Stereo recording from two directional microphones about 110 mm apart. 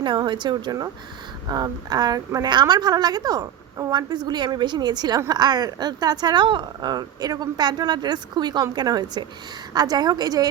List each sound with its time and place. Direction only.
0.0 s a woman's voice: 45° right (ahead or behind)